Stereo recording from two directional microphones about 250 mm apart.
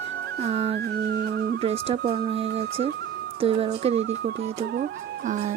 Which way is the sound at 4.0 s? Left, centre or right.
Right.